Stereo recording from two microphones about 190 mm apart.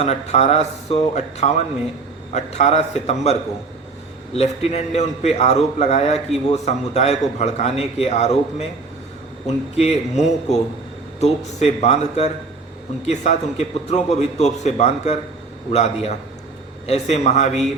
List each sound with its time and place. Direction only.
0.0 s a man's voice: 35° left (ahead or behind)
4.4 s a man's voice: 35° left (ahead or behind)